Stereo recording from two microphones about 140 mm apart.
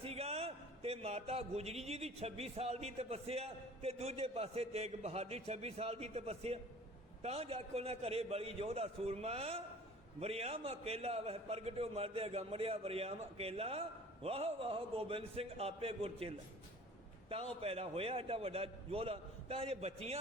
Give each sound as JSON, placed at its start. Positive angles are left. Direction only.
{"t": 0.0, "sound": "a man's voice", "side_deg": -45}
{"t": 17.6, "sound": "a man's voice", "side_deg": -45}